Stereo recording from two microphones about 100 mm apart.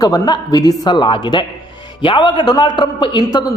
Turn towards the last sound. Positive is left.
turn(degrees=45)  # may be behind; listen again after turning